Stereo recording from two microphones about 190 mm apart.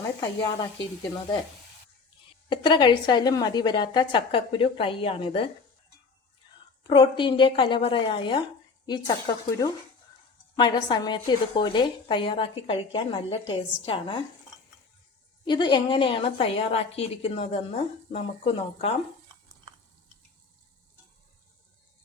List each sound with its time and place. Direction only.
2.5 s a woman's voice: 25° left (ahead or behind)
6.8 s a woman's voice: 25° left (ahead or behind)
15.4 s a woman's voice: 25° left (ahead or behind)